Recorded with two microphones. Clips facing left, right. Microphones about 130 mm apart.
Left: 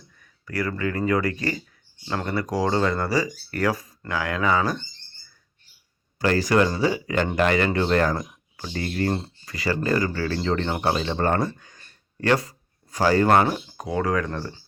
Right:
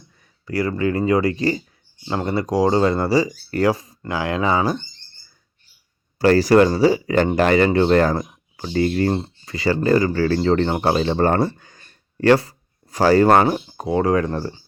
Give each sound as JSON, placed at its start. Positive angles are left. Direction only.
{"t": 0.2, "sound": "speech", "side_deg": -25}
{"t": 6.1, "sound": "speech", "side_deg": -35}
{"t": 13.0, "sound": "speech", "side_deg": -40}